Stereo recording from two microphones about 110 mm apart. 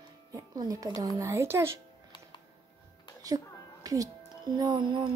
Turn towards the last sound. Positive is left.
turn(degrees=-45)  # may be behind; listen again after turning